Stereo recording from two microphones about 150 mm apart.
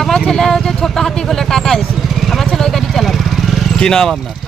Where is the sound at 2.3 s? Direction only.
Centre (ahead or behind).